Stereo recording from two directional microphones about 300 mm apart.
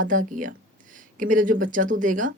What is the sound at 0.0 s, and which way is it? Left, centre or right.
Speech, right.